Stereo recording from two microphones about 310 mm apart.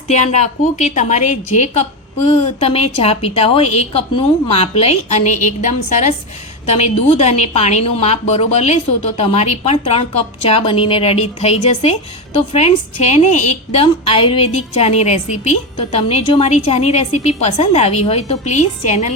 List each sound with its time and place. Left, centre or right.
0.1 s a woman's voice: left